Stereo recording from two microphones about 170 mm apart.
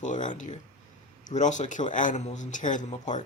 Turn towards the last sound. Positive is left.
turn(degrees=45)  # may be behind; listen again after turning